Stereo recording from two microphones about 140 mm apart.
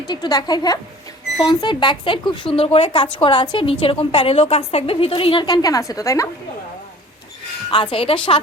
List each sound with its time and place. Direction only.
0.1 s a woman's voice: 35° left (ahead or behind)
7.7 s speech: 35° left (ahead or behind)